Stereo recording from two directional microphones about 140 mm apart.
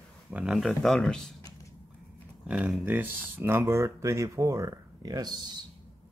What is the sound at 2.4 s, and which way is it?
Speech, 5° right (ahead or behind).